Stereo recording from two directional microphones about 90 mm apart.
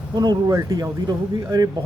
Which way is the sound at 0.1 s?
50° right (ahead or behind).